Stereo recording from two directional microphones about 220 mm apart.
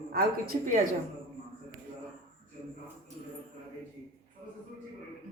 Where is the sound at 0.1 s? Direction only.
45° right (ahead or behind).